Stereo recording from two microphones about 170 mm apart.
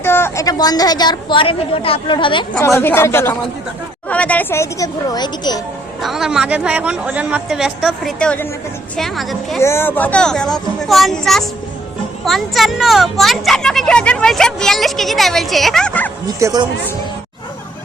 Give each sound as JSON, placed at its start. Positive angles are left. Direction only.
{"t": 0.0, "sound": "a woman's voice", "side_deg": 15}
{"t": 2.6, "sound": "a child's voice", "side_deg": 15}
{"t": 6.0, "sound": "speech", "side_deg": 0}
{"t": 9.6, "sound": "speech", "side_deg": 15}
{"t": 16.4, "sound": "speech", "side_deg": -20}